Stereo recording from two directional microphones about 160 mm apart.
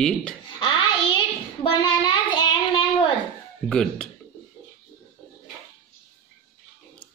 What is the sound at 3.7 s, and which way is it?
Speech, 5° left (ahead or behind).